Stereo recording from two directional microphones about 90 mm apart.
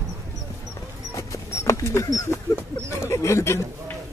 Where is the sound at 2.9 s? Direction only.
30° left (ahead or behind).